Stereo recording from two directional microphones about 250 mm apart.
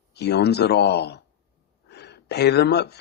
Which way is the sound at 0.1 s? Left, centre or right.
Left.